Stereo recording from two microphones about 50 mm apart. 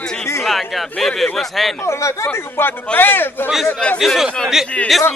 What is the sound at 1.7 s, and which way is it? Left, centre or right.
Speech, left.